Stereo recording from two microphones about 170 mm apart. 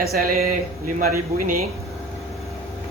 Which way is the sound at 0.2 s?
60° right (ahead or behind).